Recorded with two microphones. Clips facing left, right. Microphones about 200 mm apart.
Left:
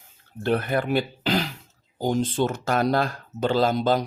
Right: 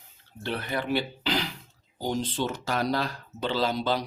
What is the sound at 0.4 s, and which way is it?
Speech, 50° left (ahead or behind).